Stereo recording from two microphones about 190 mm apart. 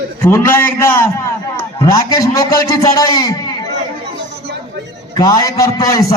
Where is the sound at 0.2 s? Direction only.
15° left (ahead or behind).